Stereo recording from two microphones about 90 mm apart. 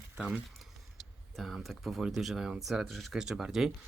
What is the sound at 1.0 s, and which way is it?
Speech, centre (ahead or behind).